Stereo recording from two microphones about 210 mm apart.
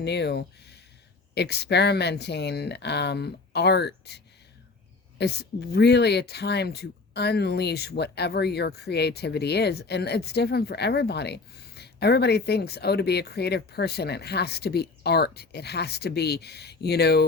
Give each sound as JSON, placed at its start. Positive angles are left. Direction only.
{"t": 0.0, "sound": "speech", "side_deg": 55}